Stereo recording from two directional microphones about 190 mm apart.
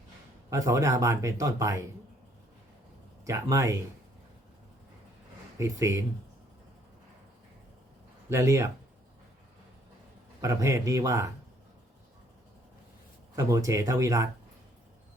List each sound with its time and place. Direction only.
0.5 s speech: 15° right (ahead or behind)
3.2 s speech: 15° right (ahead or behind)
5.5 s speech: 15° right (ahead or behind)
8.3 s speech: 15° right (ahead or behind)
10.4 s speech: 15° right (ahead or behind)
13.3 s speech: 15° right (ahead or behind)